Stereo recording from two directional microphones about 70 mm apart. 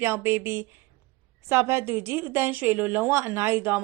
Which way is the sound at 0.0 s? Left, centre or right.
Right.